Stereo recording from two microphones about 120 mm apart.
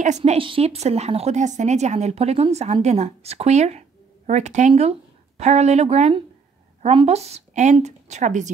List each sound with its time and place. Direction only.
0.0 s speech: 70° right (ahead or behind)
0.4 s a woman's voice: 50° right (ahead or behind); by 7.7 s 70° right (ahead or behind)
7.8 s speech: 80° right